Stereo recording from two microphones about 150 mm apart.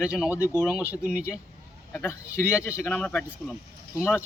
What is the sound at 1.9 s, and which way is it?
A man's voice, 15° left (ahead or behind).